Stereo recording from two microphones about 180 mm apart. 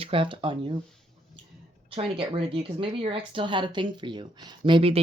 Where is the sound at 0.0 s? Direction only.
30° right (ahead or behind).